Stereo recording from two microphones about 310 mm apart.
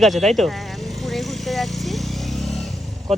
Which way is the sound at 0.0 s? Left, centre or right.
Centre.